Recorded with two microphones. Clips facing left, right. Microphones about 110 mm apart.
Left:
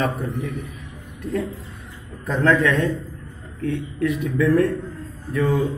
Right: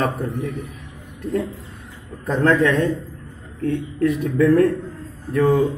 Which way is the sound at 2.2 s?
40° right (ahead or behind).